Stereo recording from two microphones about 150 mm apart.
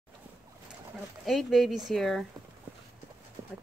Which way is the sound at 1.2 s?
Centre (ahead or behind).